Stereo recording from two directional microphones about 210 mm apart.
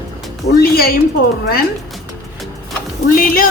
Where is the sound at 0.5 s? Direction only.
45° left (ahead or behind).